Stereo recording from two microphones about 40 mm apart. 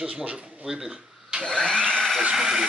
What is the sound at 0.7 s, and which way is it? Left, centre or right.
Speech, centre.